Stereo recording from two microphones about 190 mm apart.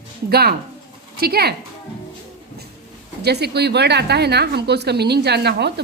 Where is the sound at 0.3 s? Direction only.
55° right (ahead or behind).